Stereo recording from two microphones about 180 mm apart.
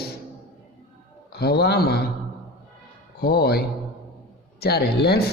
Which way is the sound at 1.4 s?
65° left (ahead or behind).